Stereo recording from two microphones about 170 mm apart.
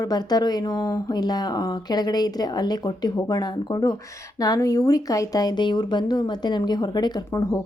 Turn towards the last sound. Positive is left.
turn(degrees=20)  # may be behind; listen again after turning